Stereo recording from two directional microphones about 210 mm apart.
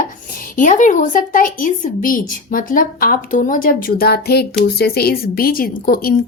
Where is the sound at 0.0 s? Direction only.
40° left (ahead or behind).